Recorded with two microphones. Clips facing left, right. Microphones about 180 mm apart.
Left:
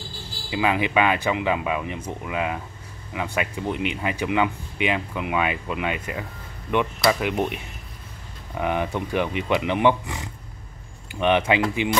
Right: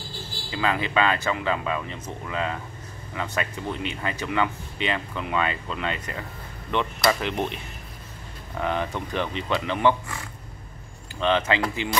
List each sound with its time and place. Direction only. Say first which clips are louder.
0.5 s speech: left 3 dB; 15° left (ahead or behind)